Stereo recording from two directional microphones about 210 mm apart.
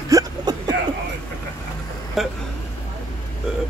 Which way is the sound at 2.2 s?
Centre (ahead or behind).